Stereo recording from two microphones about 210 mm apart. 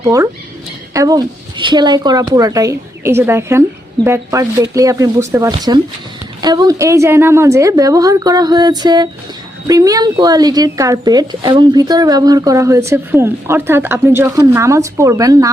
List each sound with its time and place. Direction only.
0.0 s speech: 15° right (ahead or behind)